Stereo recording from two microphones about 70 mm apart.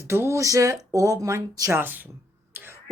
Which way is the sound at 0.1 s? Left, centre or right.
Right.